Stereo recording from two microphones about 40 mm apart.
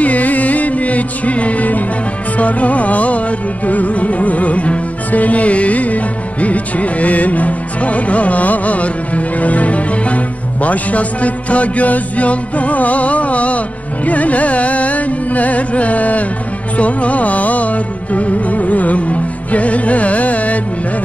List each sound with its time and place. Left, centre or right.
0.0 s music: left